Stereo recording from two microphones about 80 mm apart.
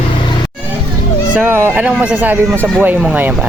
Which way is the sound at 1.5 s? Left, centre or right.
Right.